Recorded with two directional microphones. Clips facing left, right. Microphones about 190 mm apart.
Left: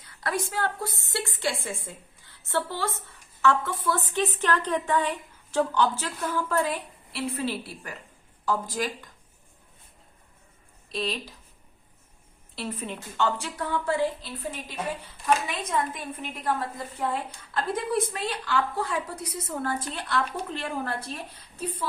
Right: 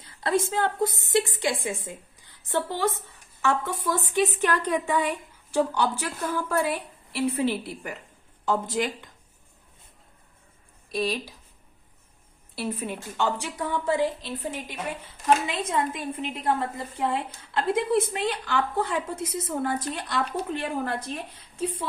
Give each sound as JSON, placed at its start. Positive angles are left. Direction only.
{"t": 0.0, "sound": "a woman's voice", "side_deg": -25}
{"t": 10.9, "sound": "a woman's voice", "side_deg": -10}
{"t": 12.5, "sound": "a woman's voice", "side_deg": -10}